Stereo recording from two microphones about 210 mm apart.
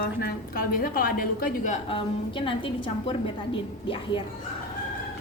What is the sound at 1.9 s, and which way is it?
A woman's voice, 25° left (ahead or behind).